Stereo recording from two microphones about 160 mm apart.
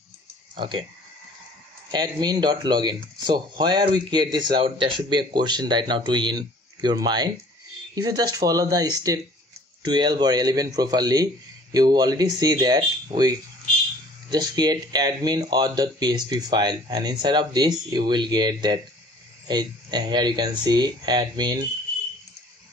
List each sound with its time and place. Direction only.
0.6 s speech: 30° right (ahead or behind)
1.9 s speech: 25° right (ahead or behind)